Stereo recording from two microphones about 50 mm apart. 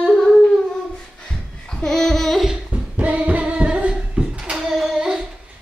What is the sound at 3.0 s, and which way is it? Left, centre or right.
Singing, right.